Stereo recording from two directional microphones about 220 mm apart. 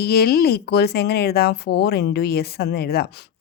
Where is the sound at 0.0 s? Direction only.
45° left (ahead or behind).